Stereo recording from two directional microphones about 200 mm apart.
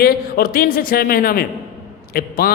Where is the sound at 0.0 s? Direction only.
50° left (ahead or behind).